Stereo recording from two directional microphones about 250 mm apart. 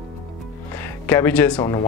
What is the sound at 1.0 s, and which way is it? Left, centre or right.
Speech, centre.